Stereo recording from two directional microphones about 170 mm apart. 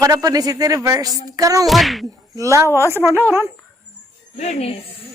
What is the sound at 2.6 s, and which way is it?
Speech, 15° left (ahead or behind).